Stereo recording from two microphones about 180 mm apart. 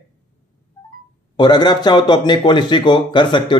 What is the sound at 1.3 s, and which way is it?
A man's voice, 25° left (ahead or behind).